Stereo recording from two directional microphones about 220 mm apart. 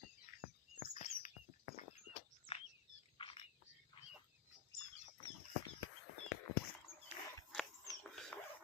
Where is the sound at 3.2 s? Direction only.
25° left (ahead or behind).